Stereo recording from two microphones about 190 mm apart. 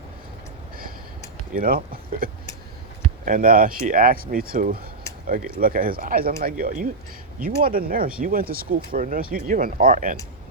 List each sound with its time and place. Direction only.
1.5 s speech: 50° right (ahead or behind)